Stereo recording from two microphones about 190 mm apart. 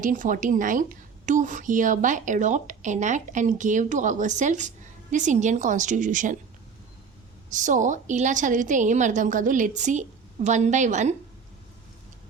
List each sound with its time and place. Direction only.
0.0 s a woman's voice: 45° right (ahead or behind)
7.5 s a woman's voice: 40° right (ahead or behind)